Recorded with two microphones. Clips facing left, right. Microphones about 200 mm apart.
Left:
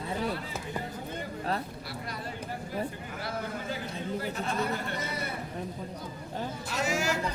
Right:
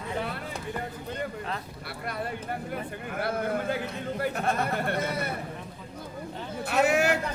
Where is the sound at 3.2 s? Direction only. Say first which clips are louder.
Right 7 dB; 55° right (ahead or behind).